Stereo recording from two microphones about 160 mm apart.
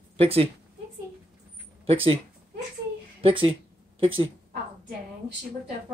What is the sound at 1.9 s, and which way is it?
Speech, 35° right (ahead or behind).